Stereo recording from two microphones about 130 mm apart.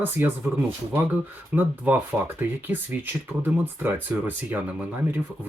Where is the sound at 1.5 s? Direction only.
15° right (ahead or behind).